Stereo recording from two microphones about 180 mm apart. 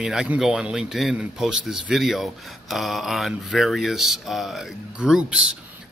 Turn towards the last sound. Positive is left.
turn(degrees=-5)  # may be behind; listen again after turning